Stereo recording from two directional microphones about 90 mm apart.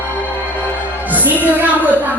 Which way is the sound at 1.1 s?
20° right (ahead or behind).